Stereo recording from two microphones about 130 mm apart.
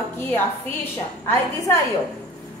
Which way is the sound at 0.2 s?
15° left (ahead or behind).